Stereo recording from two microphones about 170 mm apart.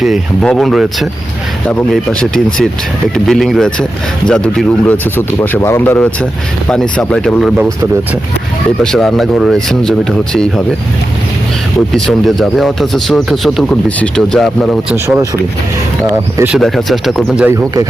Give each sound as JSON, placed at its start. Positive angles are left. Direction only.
{"t": 0.0, "sound": "speech", "side_deg": 0}
{"t": 8.8, "sound": "speech", "side_deg": 5}
{"t": 11.9, "sound": "speech", "side_deg": 0}
{"t": 14.9, "sound": "speech", "side_deg": -15}
{"t": 16.6, "sound": "speech", "side_deg": 0}